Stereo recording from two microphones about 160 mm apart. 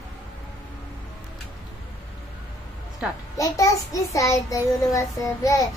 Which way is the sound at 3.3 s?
20° left (ahead or behind).